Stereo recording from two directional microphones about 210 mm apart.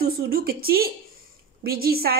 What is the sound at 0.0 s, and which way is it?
A woman's voice, 45° right (ahead or behind).